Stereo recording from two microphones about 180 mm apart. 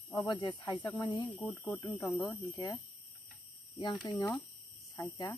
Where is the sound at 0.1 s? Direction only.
20° left (ahead or behind).